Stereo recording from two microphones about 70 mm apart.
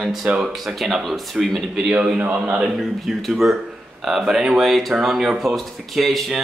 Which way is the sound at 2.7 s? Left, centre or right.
Centre.